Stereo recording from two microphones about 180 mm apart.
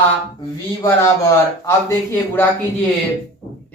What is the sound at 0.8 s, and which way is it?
Speech, 15° left (ahead or behind).